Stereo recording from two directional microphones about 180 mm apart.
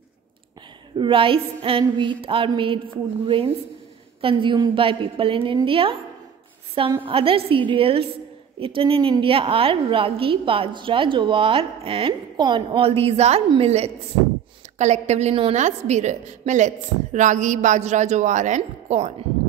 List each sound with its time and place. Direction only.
0.9 s a woman's voice: 30° right (ahead or behind)